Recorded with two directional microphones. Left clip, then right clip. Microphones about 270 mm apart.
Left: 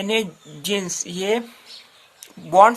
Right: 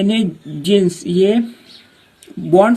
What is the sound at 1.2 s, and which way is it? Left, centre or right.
Speech, centre.